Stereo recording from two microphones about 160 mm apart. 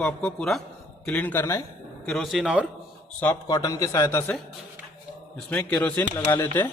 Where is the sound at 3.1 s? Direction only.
10° left (ahead or behind).